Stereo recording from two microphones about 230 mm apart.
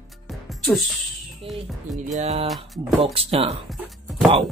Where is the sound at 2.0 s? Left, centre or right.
Right.